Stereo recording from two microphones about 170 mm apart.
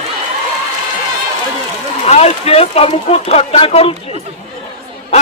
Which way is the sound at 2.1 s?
35° left (ahead or behind).